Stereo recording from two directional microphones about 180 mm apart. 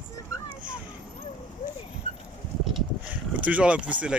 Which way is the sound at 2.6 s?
10° right (ahead or behind).